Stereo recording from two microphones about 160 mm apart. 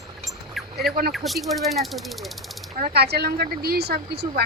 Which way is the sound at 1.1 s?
Centre (ahead or behind).